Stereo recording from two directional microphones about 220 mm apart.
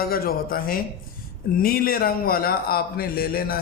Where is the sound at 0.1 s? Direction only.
40° left (ahead or behind).